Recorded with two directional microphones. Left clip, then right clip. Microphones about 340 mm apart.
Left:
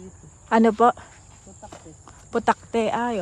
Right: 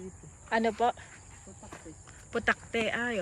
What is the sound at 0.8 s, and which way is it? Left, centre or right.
Speech, left.